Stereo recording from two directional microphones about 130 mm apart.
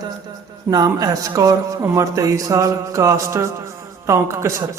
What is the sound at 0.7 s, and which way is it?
A man's voice, 30° right (ahead or behind).